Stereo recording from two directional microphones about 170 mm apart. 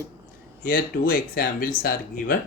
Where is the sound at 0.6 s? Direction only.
60° left (ahead or behind).